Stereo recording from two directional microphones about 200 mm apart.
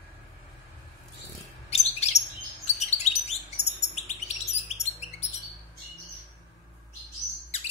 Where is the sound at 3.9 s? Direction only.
35° left (ahead or behind).